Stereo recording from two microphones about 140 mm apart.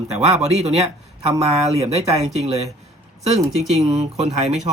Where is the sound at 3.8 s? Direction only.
55° right (ahead or behind).